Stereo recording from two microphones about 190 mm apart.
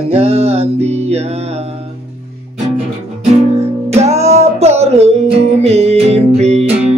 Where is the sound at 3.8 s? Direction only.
35° right (ahead or behind).